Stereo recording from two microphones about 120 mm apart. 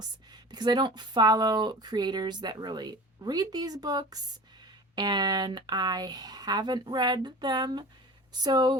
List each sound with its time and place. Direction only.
0.0 s speech: 35° right (ahead or behind)